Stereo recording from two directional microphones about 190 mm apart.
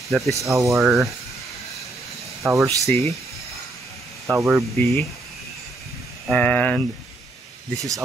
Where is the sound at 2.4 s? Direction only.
Centre (ahead or behind).